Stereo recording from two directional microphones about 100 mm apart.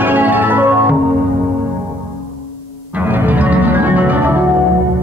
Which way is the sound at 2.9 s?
20° right (ahead or behind).